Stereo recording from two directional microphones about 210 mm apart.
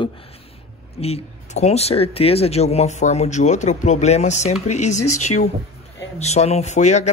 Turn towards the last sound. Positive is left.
turn(degrees=35)  # may be behind; listen again after turning